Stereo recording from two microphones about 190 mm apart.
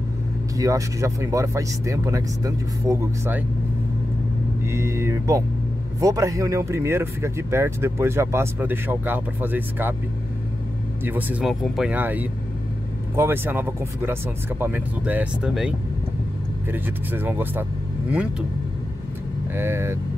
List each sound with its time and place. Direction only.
0.6 s speech: 15° right (ahead or behind)
4.6 s speech: 15° right (ahead or behind)
11.1 s speech: 10° right (ahead or behind)
16.7 s speech: 10° right (ahead or behind)
19.5 s speech: 15° right (ahead or behind)